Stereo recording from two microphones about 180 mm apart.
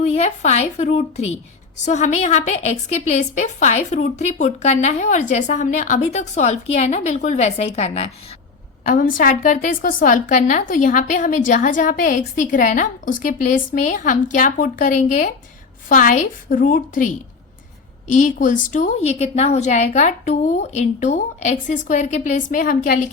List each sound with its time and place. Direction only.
0.0 s a woman's voice: 35° left (ahead or behind)
8.9 s a woman's voice: 50° left (ahead or behind)
18.1 s a woman's voice: 45° left (ahead or behind)